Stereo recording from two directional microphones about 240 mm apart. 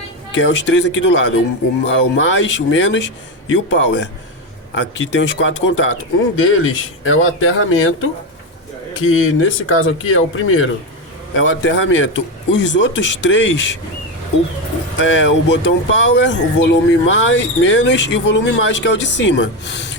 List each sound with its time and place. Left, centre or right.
0.3 s speech: left
15.0 s speech: left